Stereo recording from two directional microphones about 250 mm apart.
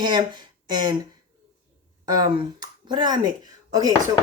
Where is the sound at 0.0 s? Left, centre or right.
Centre.